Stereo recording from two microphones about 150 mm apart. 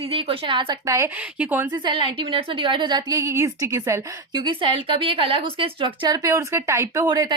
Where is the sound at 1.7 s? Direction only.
30° right (ahead or behind).